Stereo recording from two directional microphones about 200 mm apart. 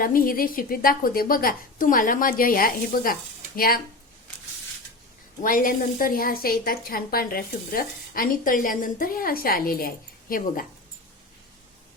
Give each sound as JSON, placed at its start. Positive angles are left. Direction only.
{"t": 0.0, "sound": "a woman's voice", "side_deg": 45}
{"t": 5.4, "sound": "a woman's voice", "side_deg": 45}